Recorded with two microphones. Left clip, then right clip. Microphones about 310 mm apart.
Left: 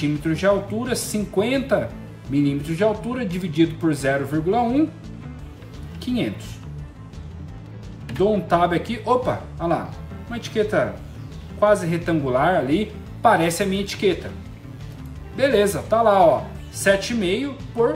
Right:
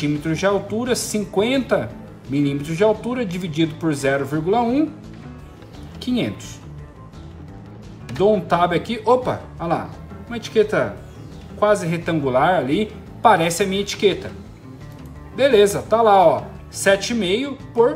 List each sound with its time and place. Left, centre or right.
0.0 s speech: centre
6.0 s speech: centre
8.1 s speech: centre
15.3 s speech: centre